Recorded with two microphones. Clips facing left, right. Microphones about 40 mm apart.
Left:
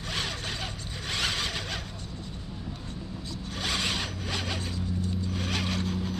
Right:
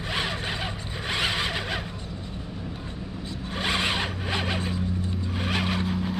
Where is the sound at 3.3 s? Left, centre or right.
Right.